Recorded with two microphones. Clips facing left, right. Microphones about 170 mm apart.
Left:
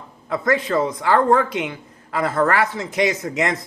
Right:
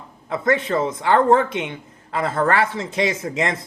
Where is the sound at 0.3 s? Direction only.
25° right (ahead or behind).